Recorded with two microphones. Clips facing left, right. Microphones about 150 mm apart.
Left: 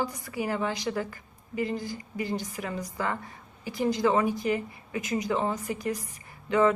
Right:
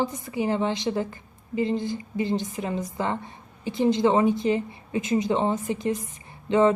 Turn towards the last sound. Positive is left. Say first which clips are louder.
# right 3 dB
turn(degrees=-25)  # may be behind; listen again after turning